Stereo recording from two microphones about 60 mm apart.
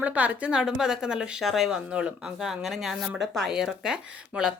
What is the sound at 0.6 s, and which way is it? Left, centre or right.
Speech, centre.